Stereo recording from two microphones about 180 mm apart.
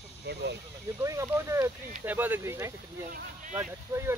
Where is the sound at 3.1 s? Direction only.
50° right (ahead or behind).